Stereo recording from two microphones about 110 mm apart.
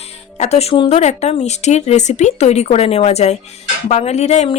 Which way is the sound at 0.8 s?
85° left.